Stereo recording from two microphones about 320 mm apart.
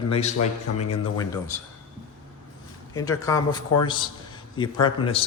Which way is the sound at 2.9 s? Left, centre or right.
Centre.